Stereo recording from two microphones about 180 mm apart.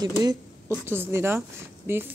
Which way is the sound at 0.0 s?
20° right (ahead or behind).